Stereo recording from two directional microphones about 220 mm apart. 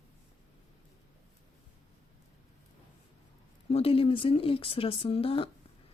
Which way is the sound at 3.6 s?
25° left (ahead or behind).